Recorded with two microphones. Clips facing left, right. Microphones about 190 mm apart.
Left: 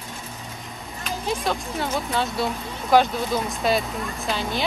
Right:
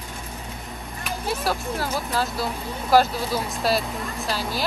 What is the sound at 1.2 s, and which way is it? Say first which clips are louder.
Speech: even; 5° right (ahead or behind).